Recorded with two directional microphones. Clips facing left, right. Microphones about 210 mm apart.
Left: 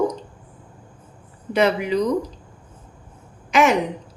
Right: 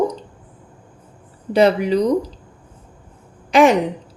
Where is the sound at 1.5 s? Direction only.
35° right (ahead or behind).